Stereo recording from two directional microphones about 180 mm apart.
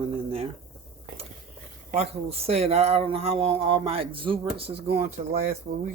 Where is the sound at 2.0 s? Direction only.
35° right (ahead or behind).